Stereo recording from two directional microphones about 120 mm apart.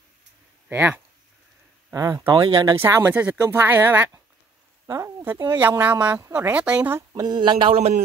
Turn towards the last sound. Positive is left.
turn(degrees=-45)  # may be behind; listen again after turning